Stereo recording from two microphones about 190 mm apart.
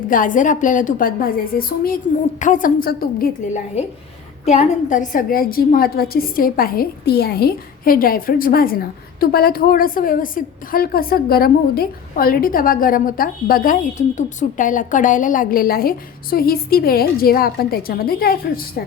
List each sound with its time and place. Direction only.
0.1 s a woman's voice: 45° left (ahead or behind)
4.4 s a woman's voice: 40° left (ahead or behind)